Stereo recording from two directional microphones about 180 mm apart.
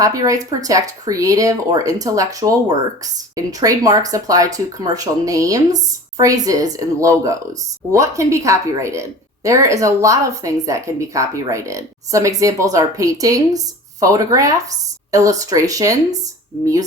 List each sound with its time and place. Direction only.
0.0 s a woman's voice: 20° right (ahead or behind)